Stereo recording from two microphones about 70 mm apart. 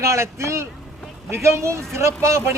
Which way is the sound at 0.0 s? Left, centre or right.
Right.